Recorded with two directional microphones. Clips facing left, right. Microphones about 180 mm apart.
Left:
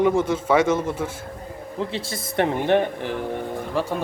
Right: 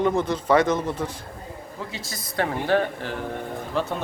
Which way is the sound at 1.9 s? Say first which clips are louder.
Left 7 dB; 30° left (ahead or behind).